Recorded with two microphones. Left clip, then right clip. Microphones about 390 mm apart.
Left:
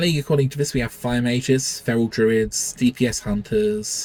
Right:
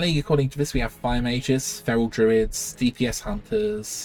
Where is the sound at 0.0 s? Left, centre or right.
Centre.